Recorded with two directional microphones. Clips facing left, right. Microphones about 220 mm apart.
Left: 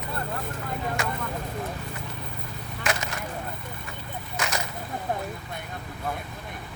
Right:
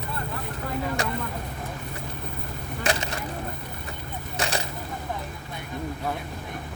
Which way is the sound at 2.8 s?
30° right (ahead or behind).